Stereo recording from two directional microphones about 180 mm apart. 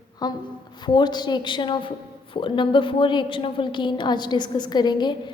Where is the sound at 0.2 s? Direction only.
20° left (ahead or behind).